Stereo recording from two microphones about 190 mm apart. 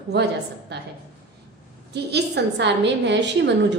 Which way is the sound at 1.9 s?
60° right (ahead or behind).